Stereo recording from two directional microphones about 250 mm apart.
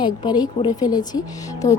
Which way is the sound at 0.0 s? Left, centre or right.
Centre.